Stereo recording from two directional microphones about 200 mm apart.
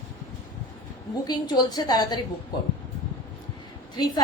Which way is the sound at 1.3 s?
20° left (ahead or behind).